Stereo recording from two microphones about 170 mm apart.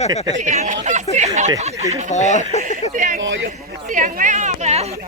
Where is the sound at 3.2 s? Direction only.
90° right.